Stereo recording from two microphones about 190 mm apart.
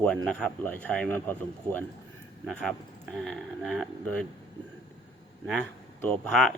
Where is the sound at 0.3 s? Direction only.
5° left (ahead or behind).